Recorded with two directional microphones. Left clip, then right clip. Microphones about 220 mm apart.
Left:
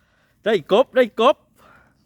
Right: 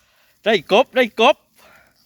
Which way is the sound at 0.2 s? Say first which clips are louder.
Right 2 dB; 10° left (ahead or behind).